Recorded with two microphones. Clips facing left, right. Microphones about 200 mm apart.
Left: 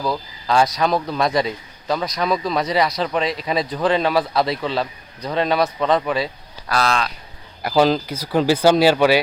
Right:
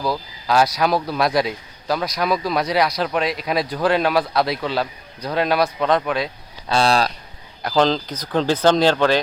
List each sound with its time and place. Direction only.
0.0 s speech: 5° right (ahead or behind)
6.7 s speech: 30° right (ahead or behind)
7.6 s speech: 10° left (ahead or behind)